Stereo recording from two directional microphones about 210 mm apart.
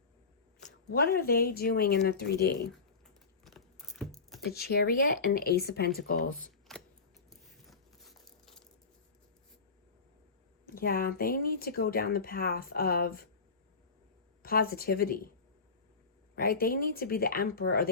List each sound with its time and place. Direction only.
0.9 s speech: 45° left (ahead or behind)
3.4 s a sound: centre (ahead or behind)
4.4 s speech: 50° left (ahead or behind)
6.7 s a sound: centre (ahead or behind)
10.7 s speech: 45° left (ahead or behind)
14.4 s speech: 45° left (ahead or behind)
16.3 s speech: 45° left (ahead or behind)